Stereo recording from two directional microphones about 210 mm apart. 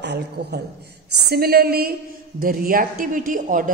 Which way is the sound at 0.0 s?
55° right (ahead or behind).